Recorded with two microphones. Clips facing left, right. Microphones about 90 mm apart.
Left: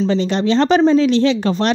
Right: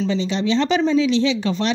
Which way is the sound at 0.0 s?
50° left (ahead or behind).